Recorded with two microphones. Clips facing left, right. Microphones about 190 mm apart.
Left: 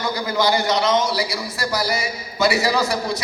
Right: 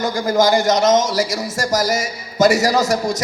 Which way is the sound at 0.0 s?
45° right (ahead or behind).